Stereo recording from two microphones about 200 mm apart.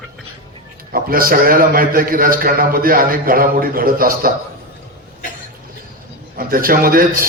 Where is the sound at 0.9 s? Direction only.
45° right (ahead or behind).